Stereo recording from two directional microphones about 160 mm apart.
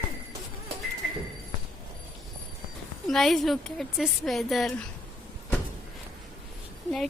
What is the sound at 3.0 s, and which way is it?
A woman's voice, centre (ahead or behind).